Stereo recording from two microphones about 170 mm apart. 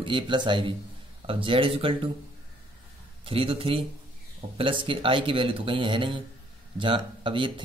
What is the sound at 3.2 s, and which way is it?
Speech, 35° right (ahead or behind).